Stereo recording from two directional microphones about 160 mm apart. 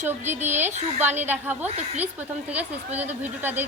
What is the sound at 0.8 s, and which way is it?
Speech, 45° right (ahead or behind).